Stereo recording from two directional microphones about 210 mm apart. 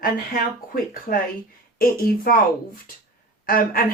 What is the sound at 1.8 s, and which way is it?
Speech, 45° left (ahead or behind).